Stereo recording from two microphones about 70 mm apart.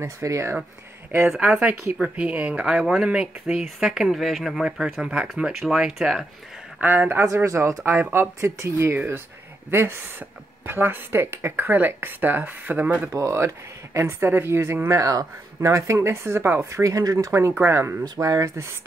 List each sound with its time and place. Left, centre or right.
0.0 s speech: right
1.4 s speech: centre
6.8 s speech: right
7.4 s a woman's voice: right
8.9 s a woman's voice: right
13.1 s a woman's voice: right
14.9 s speech: right
16.8 s speech: right
17.3 s a woman's voice: right
18.2 s speech: right